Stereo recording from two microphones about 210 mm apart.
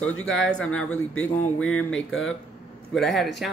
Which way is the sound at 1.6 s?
70° left (ahead or behind).